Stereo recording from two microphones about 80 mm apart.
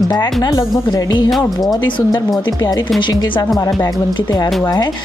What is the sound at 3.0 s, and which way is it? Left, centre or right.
Speech, left.